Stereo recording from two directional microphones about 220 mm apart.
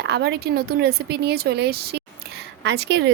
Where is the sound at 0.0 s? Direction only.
50° right (ahead or behind).